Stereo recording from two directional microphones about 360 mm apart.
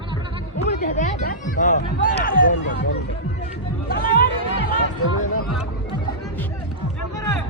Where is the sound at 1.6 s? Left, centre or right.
Left.